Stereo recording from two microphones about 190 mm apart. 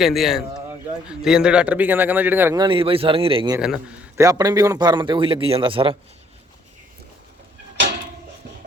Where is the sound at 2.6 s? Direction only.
30° right (ahead or behind).